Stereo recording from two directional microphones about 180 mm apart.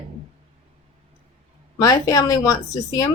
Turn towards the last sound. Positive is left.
turn(degrees=20)  # may be behind; listen again after turning